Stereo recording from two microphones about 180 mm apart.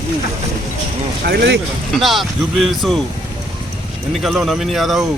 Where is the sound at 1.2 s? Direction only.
65° right (ahead or behind).